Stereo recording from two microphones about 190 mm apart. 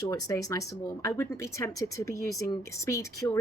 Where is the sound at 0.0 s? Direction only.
20° left (ahead or behind).